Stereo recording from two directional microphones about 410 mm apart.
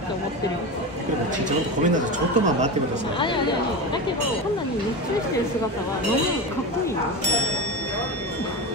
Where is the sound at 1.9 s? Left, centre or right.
Centre.